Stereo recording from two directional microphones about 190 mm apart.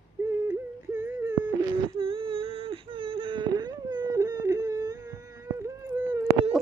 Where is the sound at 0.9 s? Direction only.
10° right (ahead or behind).